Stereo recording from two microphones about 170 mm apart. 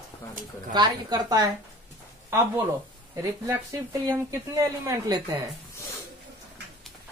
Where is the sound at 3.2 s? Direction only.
15° right (ahead or behind).